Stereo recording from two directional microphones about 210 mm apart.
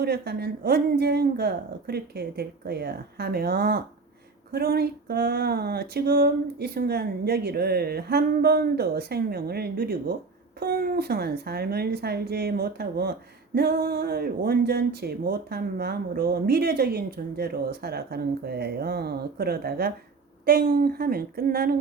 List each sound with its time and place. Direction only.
0.0 s speech: 50° right (ahead or behind)